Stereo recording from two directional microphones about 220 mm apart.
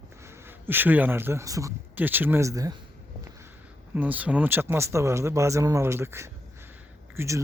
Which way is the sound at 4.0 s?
5° right (ahead or behind).